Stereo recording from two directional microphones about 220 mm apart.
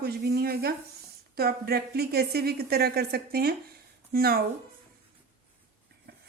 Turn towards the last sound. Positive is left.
turn(degrees=-45)  # may be behind; listen again after turning